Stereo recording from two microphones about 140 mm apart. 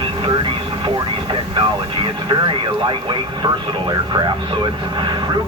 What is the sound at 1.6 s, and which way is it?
Speech, 35° right (ahead or behind).